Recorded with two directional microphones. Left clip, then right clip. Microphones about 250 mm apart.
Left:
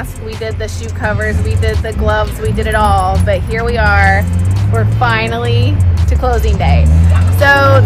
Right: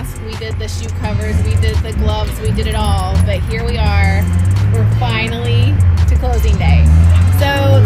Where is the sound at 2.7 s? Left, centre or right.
Left.